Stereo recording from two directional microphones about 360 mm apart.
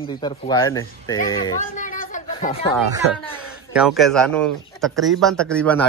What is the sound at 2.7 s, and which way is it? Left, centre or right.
A man's voice, centre.